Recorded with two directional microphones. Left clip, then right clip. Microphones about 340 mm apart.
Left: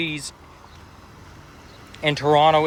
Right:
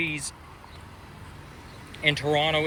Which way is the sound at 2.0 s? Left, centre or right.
Left.